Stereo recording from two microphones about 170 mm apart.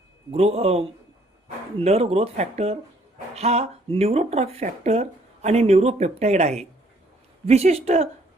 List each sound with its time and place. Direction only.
0.3 s speech: 35° right (ahead or behind)